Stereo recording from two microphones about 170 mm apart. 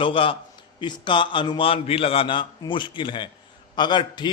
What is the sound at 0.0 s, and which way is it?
A man's voice, 30° left (ahead or behind).